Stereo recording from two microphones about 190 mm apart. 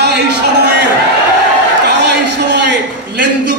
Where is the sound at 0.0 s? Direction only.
60° right (ahead or behind).